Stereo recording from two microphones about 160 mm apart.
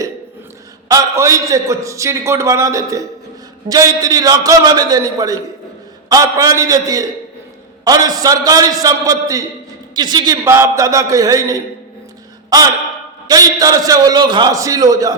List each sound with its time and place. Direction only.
0.9 s a man's voice: 20° right (ahead or behind)
12.5 s a man's voice: 20° right (ahead or behind)